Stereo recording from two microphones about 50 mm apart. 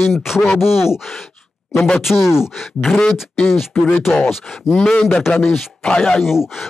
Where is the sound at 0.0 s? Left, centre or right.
Centre.